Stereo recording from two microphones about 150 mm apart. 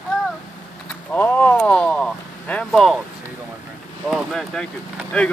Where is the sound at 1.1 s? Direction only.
10° left (ahead or behind).